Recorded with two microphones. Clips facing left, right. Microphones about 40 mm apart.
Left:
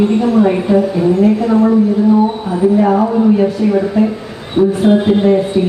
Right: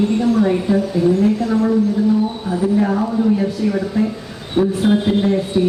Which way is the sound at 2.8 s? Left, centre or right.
Left.